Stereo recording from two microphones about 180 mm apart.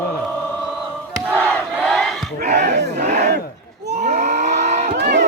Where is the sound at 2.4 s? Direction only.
40° right (ahead or behind).